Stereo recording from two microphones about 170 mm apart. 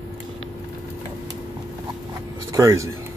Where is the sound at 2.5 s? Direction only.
20° right (ahead or behind).